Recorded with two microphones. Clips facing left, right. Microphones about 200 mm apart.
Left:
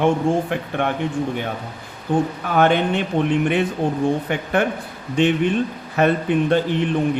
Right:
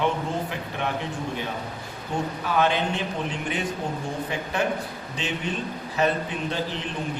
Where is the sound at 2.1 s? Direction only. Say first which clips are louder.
Left 6 dB; 55° left (ahead or behind).